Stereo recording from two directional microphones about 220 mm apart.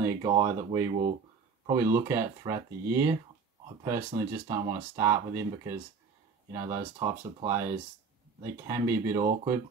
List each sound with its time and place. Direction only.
0.0 s speech: 20° right (ahead or behind)
4.5 s speech: 15° right (ahead or behind)